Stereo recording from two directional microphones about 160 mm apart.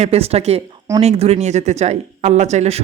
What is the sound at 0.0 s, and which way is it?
A woman's voice, 40° right (ahead or behind).